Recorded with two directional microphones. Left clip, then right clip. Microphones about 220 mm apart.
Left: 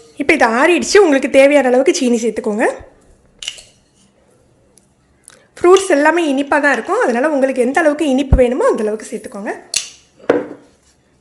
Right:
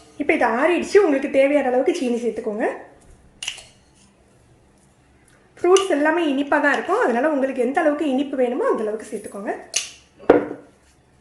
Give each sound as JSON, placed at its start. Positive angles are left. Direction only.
{"t": 0.2, "sound": "a woman's voice", "side_deg": 40}
{"t": 5.5, "sound": "a woman's voice", "side_deg": 40}